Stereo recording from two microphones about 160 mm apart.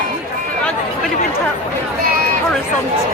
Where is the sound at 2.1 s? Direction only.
65° right (ahead or behind).